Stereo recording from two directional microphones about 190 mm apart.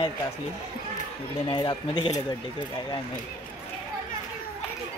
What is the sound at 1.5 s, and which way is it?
Speech, 25° left (ahead or behind).